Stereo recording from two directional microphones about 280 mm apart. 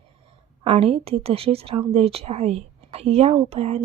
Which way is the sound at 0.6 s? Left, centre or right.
Right.